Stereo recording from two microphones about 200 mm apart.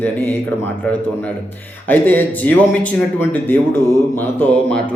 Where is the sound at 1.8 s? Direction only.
10° left (ahead or behind).